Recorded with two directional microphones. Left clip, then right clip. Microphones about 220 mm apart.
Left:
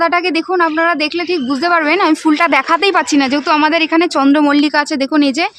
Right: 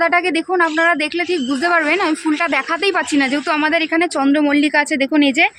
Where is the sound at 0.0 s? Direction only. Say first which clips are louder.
Left 2 dB; 15° left (ahead or behind).